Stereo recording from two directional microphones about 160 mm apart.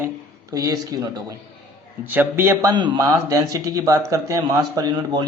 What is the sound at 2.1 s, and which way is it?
Speech, 15° right (ahead or behind).